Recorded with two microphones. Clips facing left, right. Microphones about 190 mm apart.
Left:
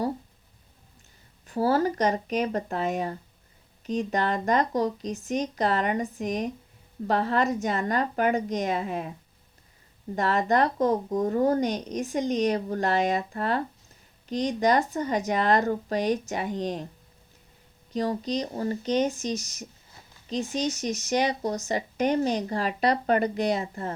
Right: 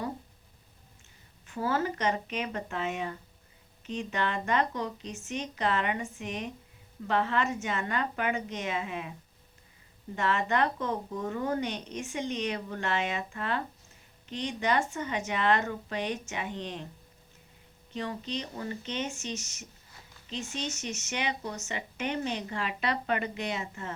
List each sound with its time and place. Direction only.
1.5 s speech: 35° left (ahead or behind)
10.2 s speech: 40° left (ahead or behind)
17.9 s speech: 40° left (ahead or behind)